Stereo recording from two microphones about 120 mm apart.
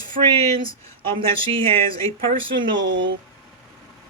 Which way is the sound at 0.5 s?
45° right (ahead or behind).